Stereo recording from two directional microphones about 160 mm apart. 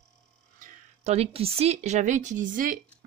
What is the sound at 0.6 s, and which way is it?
Speech, 40° right (ahead or behind).